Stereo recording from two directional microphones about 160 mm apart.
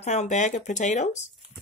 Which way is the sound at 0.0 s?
45° left (ahead or behind).